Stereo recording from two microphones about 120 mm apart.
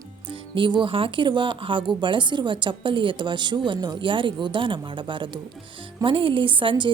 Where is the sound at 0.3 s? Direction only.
45° right (ahead or behind).